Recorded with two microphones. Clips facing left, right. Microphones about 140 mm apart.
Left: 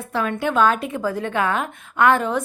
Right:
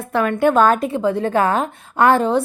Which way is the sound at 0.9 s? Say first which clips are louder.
Right 5 dB; 30° right (ahead or behind).